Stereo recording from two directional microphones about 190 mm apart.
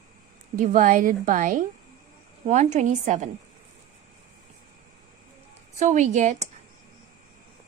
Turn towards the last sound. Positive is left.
turn(degrees=-40)  # may be behind; listen again after turning